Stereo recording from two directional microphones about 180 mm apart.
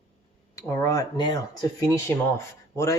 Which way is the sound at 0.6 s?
15° left (ahead or behind).